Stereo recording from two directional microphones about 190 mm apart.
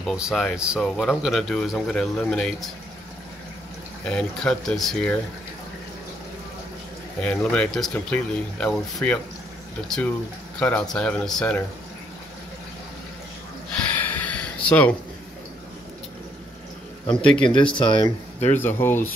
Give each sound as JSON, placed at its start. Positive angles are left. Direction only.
{"t": 0.0, "sound": "speech", "side_deg": 0}
{"t": 4.0, "sound": "speech", "side_deg": 5}
{"t": 7.2, "sound": "speech", "side_deg": 5}
{"t": 13.7, "sound": "a sound", "side_deg": 10}
{"t": 17.1, "sound": "speech", "side_deg": 5}
{"t": 17.4, "sound": "speech", "side_deg": 25}
{"t": 18.6, "sound": "speech", "side_deg": 10}